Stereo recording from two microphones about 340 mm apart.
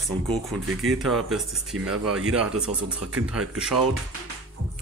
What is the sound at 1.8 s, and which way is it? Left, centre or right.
Speech, right.